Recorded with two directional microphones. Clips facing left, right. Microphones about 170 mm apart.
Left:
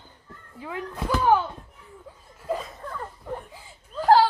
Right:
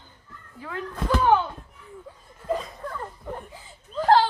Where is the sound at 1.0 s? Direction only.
5° left (ahead or behind).